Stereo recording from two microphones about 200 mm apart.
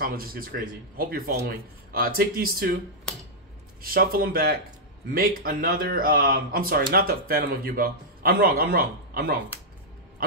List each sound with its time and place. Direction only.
0.0 s speech: 45° right (ahead or behind)
3.8 s speech: 50° right (ahead or behind)